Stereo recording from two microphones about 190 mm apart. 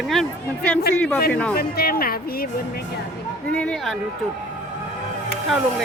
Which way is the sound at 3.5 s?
5° left (ahead or behind).